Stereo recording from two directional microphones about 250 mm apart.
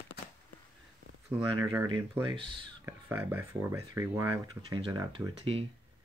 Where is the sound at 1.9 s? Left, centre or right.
Centre.